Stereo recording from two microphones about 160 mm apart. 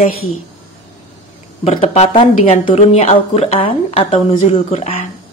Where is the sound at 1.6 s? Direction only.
40° left (ahead or behind).